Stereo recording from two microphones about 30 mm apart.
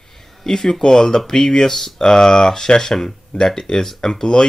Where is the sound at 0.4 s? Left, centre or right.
Centre.